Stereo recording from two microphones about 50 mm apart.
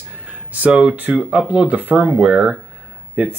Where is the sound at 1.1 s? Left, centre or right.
Right.